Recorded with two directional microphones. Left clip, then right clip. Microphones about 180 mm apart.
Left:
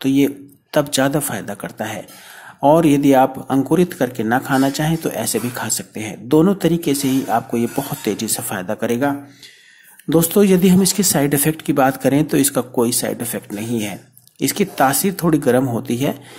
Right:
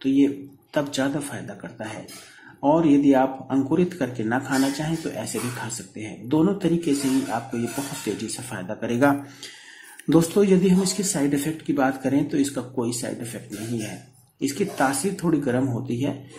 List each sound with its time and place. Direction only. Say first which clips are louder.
0.0 s speech: left 4 dB; 25° left (ahead or behind)
10.0 s speech: left 3 dB; 15° left (ahead or behind)
10.3 s speech: left 5 dB; 30° left (ahead or behind)
14.4 s speech: left 7 dB; 25° left (ahead or behind)